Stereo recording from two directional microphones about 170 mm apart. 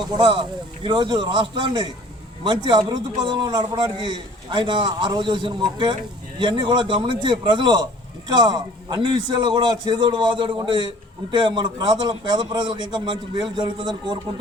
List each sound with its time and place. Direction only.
0.1 s a man's voice: 25° right (ahead or behind)